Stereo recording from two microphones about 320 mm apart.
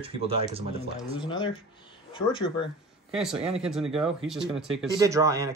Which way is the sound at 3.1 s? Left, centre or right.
Centre.